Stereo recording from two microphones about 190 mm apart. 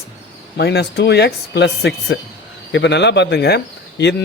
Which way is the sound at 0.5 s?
60° left (ahead or behind).